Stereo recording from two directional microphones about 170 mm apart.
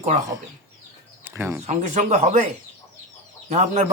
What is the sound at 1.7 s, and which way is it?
Speech, 45° right (ahead or behind).